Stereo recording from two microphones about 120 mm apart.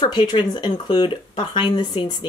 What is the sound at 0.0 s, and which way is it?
Speech, 40° left (ahead or behind).